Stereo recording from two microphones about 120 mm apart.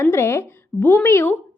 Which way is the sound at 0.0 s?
20° left (ahead or behind).